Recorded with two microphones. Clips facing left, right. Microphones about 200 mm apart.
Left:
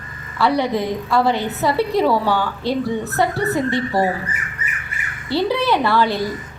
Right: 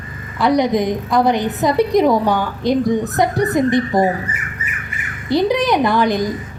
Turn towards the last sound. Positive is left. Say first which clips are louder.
# right 3 dB
turn(degrees=-15)  # may be behind; listen again after turning